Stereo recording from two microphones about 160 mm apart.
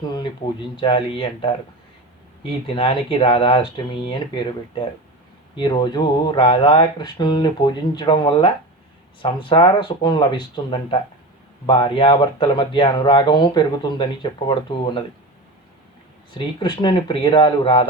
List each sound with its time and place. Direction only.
0.8 s speech: 35° left (ahead or behind)
2.6 s speech: 35° left (ahead or behind)
16.6 s speech: 30° left (ahead or behind)